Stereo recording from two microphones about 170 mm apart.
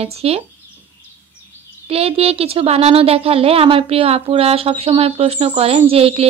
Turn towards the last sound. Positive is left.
turn(degrees=-35)  # may be behind; listen again after turning